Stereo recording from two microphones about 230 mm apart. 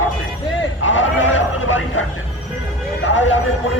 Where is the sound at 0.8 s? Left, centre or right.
Left.